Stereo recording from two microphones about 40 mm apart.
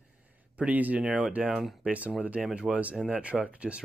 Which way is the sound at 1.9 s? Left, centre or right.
Right.